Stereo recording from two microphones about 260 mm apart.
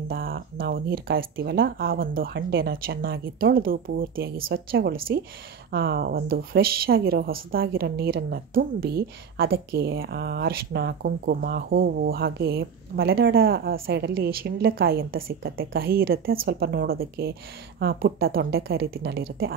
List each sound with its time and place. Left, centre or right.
0.1 s speech: right